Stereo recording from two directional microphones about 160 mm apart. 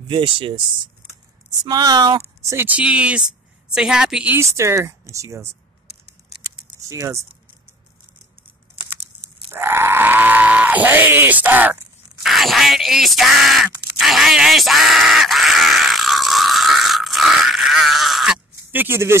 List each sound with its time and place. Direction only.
0.1 s speech: 30° right (ahead or behind)
1.6 s speech: 25° right (ahead or behind)
2.5 s speech: 10° right (ahead or behind)
6.8 s speech: 20° right (ahead or behind)
9.5 s speech: 15° right (ahead or behind)
13.9 s a sound: centre (ahead or behind)